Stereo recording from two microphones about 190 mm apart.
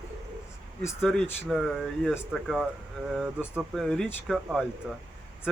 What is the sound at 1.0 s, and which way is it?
Speech, centre (ahead or behind).